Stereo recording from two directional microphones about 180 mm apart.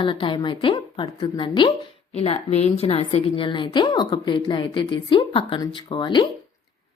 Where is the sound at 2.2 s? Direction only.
35° left (ahead or behind).